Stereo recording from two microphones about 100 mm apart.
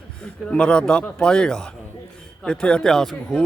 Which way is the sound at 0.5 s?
10° left (ahead or behind).